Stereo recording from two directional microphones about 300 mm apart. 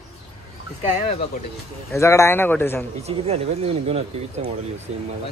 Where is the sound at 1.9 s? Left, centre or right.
Centre.